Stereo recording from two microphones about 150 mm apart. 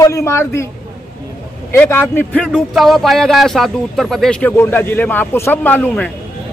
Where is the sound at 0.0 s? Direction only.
20° left (ahead or behind).